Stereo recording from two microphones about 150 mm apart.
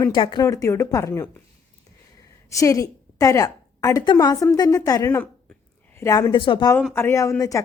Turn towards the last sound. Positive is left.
turn(degrees=20)  # may be behind; listen again after turning